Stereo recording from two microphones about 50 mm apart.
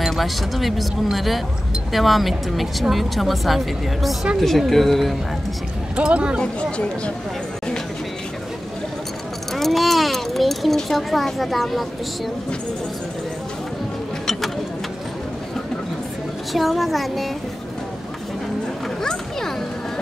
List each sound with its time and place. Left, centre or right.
0.1 s speech: centre
5.9 s speech: right
9.5 s speech: centre
16.5 s speech: centre